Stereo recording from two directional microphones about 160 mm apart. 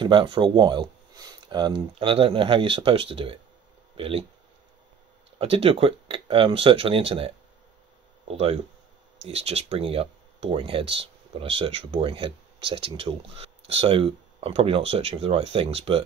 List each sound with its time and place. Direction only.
0.0 s speech: 30° right (ahead or behind)
5.4 s speech: 35° right (ahead or behind)